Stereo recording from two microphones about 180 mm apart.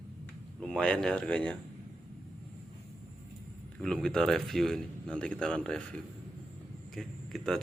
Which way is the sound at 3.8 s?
5° left (ahead or behind).